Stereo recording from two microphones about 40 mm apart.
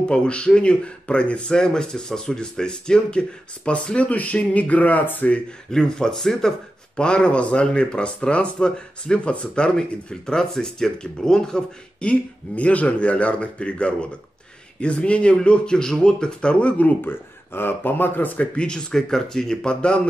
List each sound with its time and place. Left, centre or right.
0.1 s speech: left
5.7 s speech: centre
12.5 s speech: left
17.0 s speech: left
18.6 s speech: left